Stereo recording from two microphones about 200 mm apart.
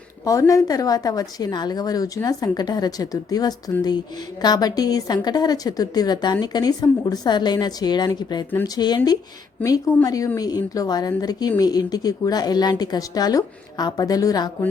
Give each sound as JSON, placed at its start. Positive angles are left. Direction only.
{"t": 0.3, "sound": "a woman's voice", "side_deg": 15}